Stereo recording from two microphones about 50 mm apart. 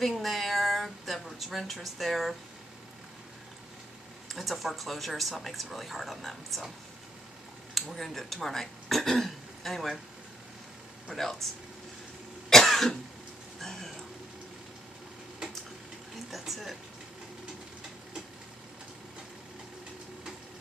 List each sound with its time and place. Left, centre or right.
0.0 s a sound: centre
4.3 s speech: centre
7.7 s speech: centre
11.1 s speech: centre
12.4 s cough: centre
13.6 s speech: centre
16.3 s speech: centre